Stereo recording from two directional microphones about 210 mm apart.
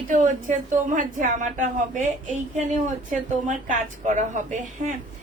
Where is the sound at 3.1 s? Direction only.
35° right (ahead or behind).